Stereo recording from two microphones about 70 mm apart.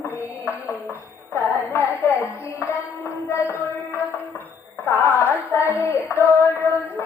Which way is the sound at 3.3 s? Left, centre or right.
Left.